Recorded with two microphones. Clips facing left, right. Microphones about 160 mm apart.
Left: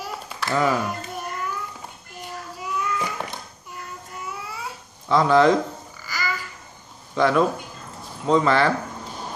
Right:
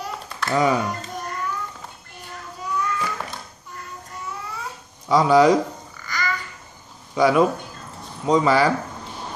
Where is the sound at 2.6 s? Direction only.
15° left (ahead or behind).